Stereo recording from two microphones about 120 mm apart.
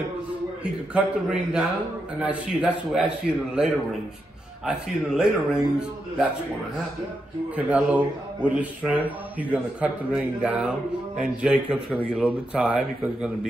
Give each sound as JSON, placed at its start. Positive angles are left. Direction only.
{"t": 0.9, "sound": "a man's voice", "side_deg": -10}
{"t": 7.5, "sound": "speech", "side_deg": -10}